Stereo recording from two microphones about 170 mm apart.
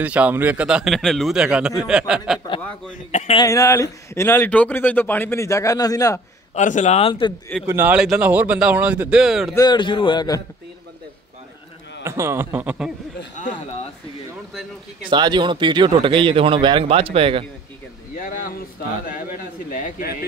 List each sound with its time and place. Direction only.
0.0 s speech: 10° right (ahead or behind)
3.1 s speech: 45° left (ahead or behind)
3.3 s speech: 20° left (ahead or behind)
6.5 s a man's voice: 45° left (ahead or behind); by 7.3 s 30° left (ahead or behind)
7.6 s speech: 10° right (ahead or behind)
9.6 s a man's voice: 25° left (ahead or behind)
12.0 s speech: 15° right (ahead or behind)
15.0 s speech: 25° right (ahead or behind)
18.1 s a man's voice: 55° left (ahead or behind)